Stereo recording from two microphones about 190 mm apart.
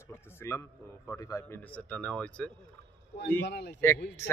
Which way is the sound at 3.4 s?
60° left (ahead or behind).